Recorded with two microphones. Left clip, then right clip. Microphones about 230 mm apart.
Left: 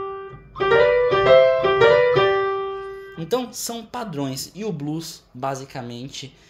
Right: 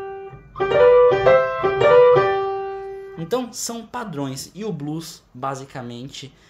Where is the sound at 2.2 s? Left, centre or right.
Right.